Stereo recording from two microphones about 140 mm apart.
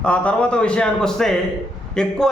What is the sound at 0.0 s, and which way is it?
A man's voice, 10° left (ahead or behind).